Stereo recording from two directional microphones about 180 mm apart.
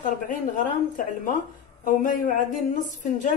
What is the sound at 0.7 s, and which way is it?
A woman's voice, 45° left (ahead or behind).